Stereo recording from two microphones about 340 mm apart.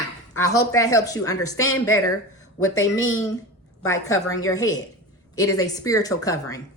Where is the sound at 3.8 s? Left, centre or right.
Centre.